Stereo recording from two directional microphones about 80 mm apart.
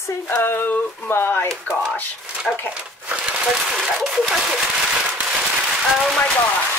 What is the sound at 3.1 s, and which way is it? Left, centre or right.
Speech, centre.